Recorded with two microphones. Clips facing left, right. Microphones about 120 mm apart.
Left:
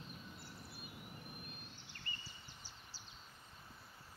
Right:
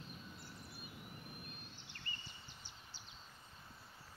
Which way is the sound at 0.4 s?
10° left (ahead or behind).